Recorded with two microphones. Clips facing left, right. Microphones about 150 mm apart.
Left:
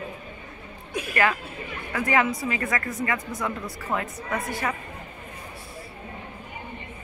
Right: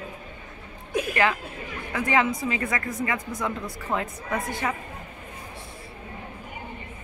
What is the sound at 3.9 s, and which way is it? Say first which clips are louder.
Speech: right 1 dB; 5° left (ahead or behind).